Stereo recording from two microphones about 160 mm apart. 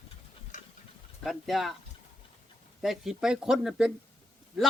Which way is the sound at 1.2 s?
Centre (ahead or behind).